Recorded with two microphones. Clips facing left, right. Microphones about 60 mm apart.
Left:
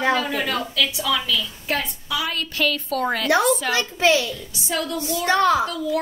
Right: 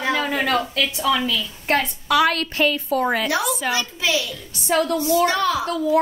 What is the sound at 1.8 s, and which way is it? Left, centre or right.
Speech, right.